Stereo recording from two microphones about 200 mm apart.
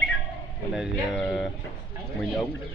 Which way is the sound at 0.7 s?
5° right (ahead or behind).